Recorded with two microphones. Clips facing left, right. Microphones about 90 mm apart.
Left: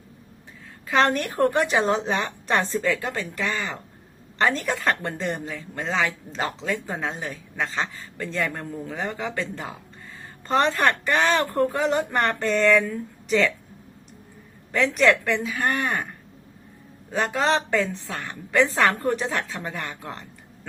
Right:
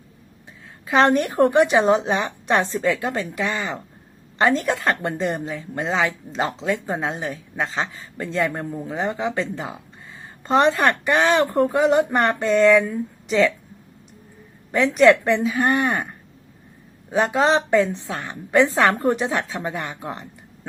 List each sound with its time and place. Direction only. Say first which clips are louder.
0.9 s a woman's voice: right 4 dB; 15° right (ahead or behind)
8.2 s a woman's voice: right 4 dB; 20° right (ahead or behind)
14.7 s speech: right 5 dB; 15° right (ahead or behind)
17.1 s a woman's voice: right 4 dB; 15° right (ahead or behind)